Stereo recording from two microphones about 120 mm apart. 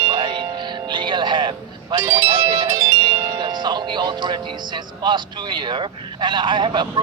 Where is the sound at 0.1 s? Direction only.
40° right (ahead or behind).